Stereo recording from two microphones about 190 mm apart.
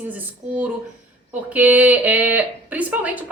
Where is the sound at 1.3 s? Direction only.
10° right (ahead or behind).